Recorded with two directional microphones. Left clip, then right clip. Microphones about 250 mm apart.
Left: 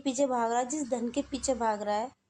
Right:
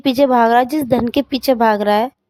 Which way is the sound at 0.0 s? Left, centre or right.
Right.